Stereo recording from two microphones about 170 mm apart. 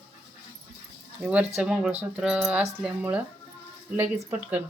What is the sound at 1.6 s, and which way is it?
A woman's voice, 5° right (ahead or behind).